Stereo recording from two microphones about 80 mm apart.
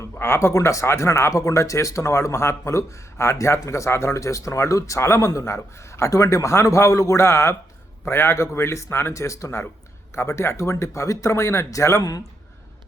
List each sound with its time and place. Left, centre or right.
0.0 s speech: left